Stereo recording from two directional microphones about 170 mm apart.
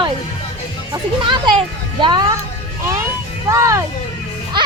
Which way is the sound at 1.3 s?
25° right (ahead or behind).